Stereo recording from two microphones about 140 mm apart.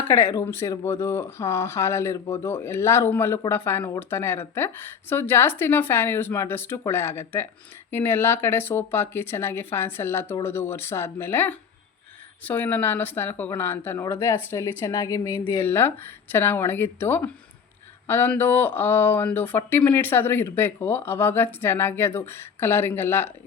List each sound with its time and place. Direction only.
0.1 s speech: 20° left (ahead or behind)